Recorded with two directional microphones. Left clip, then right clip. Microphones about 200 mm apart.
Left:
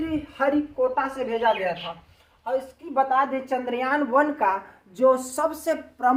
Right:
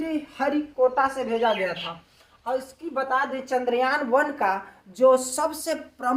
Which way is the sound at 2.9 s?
25° right (ahead or behind).